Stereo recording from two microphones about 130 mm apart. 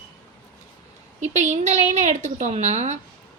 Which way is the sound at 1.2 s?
65° right (ahead or behind).